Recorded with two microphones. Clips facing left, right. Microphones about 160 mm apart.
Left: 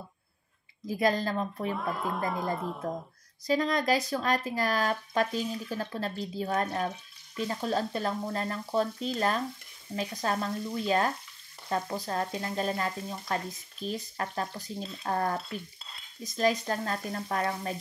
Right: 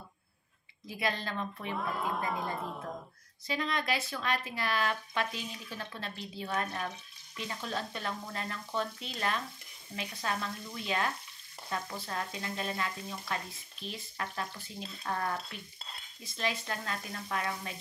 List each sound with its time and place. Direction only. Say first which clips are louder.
0.8 s frying: left 8 dB; 40° left (ahead or behind)
1.7 s speech: left 3 dB; centre (ahead or behind)
3.4 s frying: left 7 dB; 40° left (ahead or behind)